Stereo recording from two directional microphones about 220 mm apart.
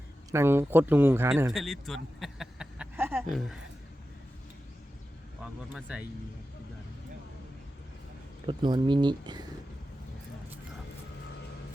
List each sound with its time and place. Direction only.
0.3 s a man's voice: 10° right (ahead or behind)
1.5 s a sound: centre (ahead or behind)
3.3 s speech: centre (ahead or behind)
5.7 s speech: 5° right (ahead or behind)
8.4 s speech: 20° right (ahead or behind)